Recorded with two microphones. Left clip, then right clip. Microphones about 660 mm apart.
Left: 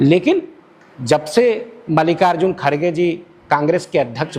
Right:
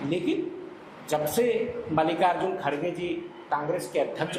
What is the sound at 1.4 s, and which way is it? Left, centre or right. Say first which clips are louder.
Speech: left 10 dB; left.